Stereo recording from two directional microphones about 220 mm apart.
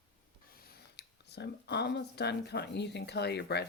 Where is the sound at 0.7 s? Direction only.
50° left (ahead or behind).